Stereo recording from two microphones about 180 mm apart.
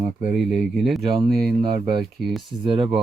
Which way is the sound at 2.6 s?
30° right (ahead or behind).